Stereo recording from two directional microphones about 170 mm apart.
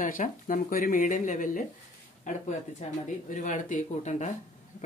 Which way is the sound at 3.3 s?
50° left (ahead or behind).